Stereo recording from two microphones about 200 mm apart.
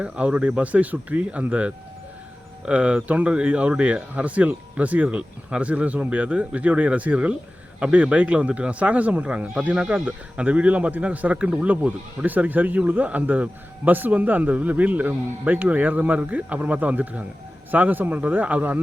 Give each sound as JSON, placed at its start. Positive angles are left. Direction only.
{"t": 0.0, "sound": "speech", "side_deg": -5}